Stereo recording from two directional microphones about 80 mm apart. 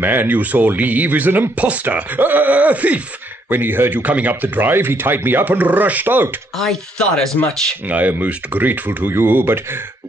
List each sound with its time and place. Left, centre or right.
0.0 s speech: right
6.6 s speech: centre
7.9 s speech: right